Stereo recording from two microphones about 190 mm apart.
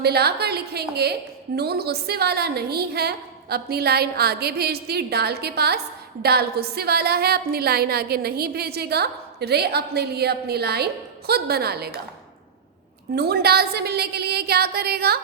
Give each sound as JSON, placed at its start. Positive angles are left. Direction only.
{"t": 0.0, "sound": "a woman's voice", "side_deg": -60}
{"t": 13.1, "sound": "a woman's voice", "side_deg": -55}